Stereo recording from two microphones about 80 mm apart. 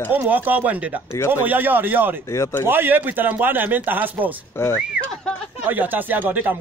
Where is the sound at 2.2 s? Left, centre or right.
Left.